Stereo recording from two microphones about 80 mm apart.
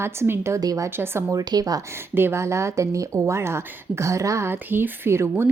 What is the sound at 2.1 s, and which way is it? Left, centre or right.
Speech, right.